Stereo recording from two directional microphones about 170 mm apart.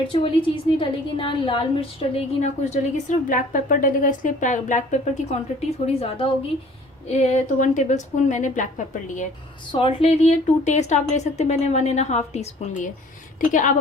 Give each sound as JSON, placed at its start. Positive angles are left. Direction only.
{"t": 0.1, "sound": "a woman's voice", "side_deg": 30}
{"t": 9.7, "sound": "a woman's voice", "side_deg": 35}